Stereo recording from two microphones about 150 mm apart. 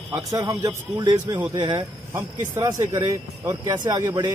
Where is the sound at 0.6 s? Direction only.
20° right (ahead or behind).